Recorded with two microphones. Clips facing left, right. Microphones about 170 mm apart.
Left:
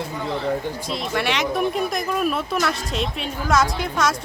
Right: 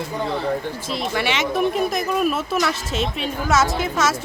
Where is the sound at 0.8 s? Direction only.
Centre (ahead or behind).